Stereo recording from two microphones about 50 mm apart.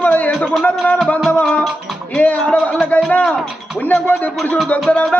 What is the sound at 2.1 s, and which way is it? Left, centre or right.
A man's voice, left.